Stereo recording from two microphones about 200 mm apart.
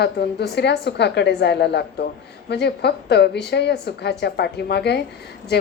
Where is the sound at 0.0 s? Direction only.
55° left (ahead or behind).